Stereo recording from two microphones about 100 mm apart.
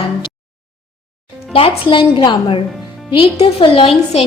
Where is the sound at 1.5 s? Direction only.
60° left (ahead or behind); by 4.3 s 80° left.